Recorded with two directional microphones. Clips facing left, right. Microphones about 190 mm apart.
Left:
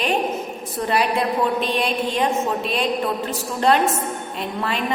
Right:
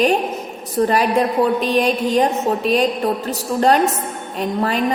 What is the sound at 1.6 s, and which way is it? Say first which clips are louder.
A woman's voice: right 5 dB; 40° right (ahead or behind).